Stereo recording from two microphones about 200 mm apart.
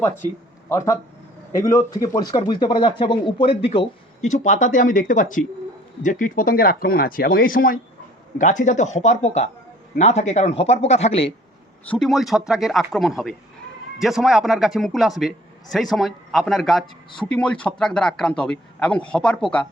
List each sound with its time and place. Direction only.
0.7 s a man's voice: 15° left (ahead or behind); by 11.3 s 30° left (ahead or behind)
11.9 s speech: centre (ahead or behind)